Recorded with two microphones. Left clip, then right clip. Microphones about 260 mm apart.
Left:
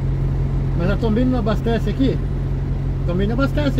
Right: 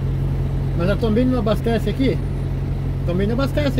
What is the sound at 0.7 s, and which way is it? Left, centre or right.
Vehicle, right.